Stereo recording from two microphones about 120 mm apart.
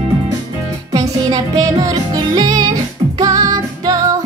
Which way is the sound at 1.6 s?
30° right (ahead or behind).